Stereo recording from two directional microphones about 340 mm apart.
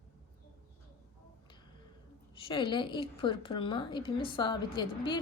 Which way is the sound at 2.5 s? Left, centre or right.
Centre.